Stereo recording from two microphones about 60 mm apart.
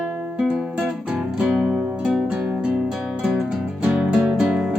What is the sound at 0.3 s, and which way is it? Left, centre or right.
Music, centre.